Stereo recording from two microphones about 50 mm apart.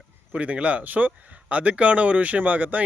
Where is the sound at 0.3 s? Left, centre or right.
Right.